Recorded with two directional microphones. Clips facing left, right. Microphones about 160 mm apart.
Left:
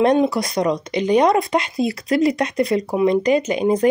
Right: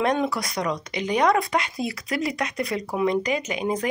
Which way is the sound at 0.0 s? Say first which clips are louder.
Left 7 dB; 25° left (ahead or behind).